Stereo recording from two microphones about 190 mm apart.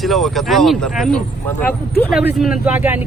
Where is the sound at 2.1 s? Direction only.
5° right (ahead or behind).